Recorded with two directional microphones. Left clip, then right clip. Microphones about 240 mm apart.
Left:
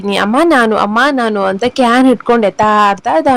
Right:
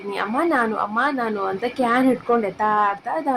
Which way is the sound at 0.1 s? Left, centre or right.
Left.